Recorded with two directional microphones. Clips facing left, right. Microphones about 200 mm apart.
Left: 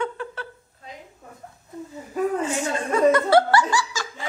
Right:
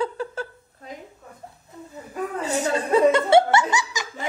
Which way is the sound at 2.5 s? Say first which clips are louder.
Right 3 dB; 35° right (ahead or behind).